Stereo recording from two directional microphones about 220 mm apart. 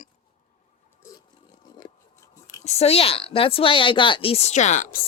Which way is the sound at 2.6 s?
30° left (ahead or behind).